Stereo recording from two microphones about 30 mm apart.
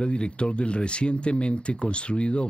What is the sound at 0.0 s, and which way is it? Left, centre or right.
Speech, left.